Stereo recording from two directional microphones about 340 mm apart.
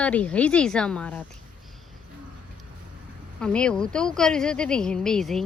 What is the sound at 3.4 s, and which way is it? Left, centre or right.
Speech, centre.